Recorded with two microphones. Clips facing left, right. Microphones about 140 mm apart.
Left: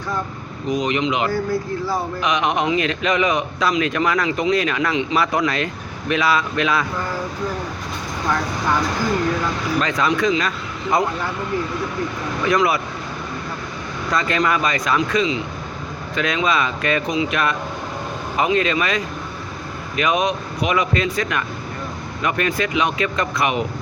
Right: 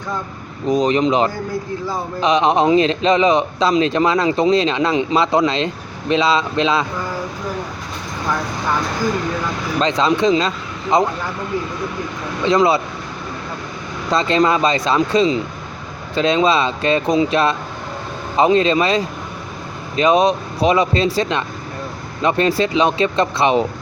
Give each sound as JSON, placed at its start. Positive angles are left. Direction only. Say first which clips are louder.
{"t": 0.7, "sound": "speech", "louder": "right 5 dB", "side_deg": -35}
{"t": 9.8, "sound": "speech", "louder": "right 6 dB", "side_deg": -25}
{"t": 12.4, "sound": "speech", "louder": "right 4 dB", "side_deg": -25}
{"t": 14.1, "sound": "speech", "louder": "right 5 dB", "side_deg": -25}